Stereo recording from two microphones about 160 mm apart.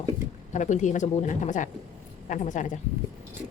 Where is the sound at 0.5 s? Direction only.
50° left (ahead or behind).